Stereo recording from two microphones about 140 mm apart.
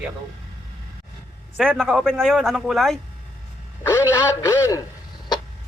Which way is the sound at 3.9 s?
20° left (ahead or behind).